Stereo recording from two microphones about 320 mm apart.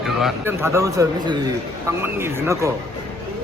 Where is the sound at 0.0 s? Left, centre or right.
Centre.